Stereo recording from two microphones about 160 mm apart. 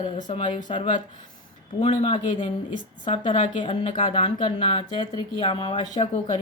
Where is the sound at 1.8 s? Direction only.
40° left (ahead or behind).